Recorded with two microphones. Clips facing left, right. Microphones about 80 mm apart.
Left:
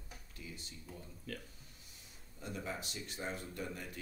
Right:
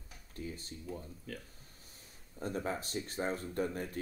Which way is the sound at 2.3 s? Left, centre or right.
Right.